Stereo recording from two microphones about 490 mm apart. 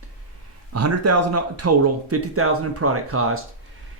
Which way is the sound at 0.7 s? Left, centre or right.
Right.